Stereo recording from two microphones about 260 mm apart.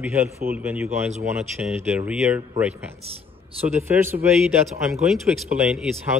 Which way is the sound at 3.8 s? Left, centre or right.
Centre.